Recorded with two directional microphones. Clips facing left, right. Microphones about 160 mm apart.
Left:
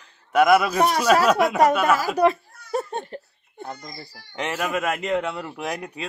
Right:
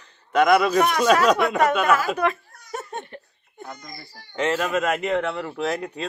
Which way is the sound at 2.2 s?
35° left (ahead or behind).